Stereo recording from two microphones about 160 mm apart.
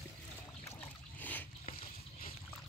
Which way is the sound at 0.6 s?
15° left (ahead or behind).